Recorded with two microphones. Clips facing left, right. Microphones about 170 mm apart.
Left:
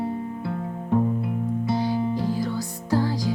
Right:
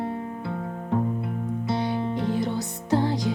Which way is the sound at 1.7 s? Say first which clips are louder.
Left 1 dB; 20° right (ahead or behind).